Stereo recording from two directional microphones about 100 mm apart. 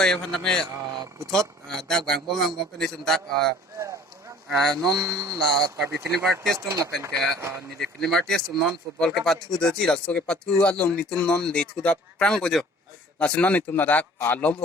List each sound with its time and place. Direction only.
0.0 s a man's voice: 5° left (ahead or behind)
4.6 s a man's voice: 5° left (ahead or behind)
5.1 s speech: 35° right (ahead or behind)
6.1 s a man's voice: 5° left (ahead or behind)
6.6 s speech: 30° right (ahead or behind)
7.8 s a man's voice: 5° left (ahead or behind)